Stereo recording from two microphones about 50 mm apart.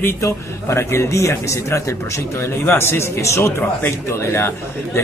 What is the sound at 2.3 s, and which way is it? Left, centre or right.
Speech, left.